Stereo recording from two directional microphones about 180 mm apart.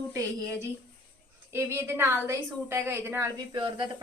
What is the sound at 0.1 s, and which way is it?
A woman's voice, 20° right (ahead or behind).